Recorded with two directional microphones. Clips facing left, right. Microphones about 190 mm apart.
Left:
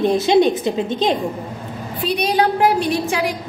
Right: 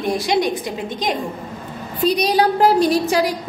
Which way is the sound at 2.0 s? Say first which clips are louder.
Right 2 dB; 40° right (ahead or behind).